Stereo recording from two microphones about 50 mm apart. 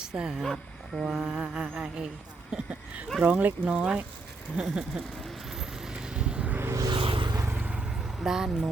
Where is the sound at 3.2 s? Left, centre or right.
Right.